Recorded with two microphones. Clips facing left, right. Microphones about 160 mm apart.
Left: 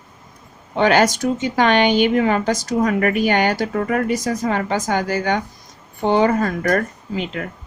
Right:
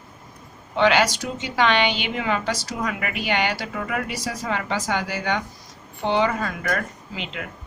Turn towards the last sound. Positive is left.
turn(degrees=45)  # may be behind; listen again after turning